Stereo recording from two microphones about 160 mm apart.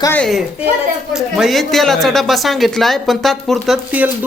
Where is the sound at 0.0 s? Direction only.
10° left (ahead or behind).